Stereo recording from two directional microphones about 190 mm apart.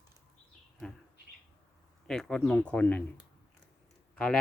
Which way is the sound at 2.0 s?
5° left (ahead or behind).